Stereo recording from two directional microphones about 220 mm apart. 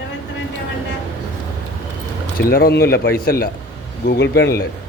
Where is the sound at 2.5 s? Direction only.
45° left (ahead or behind).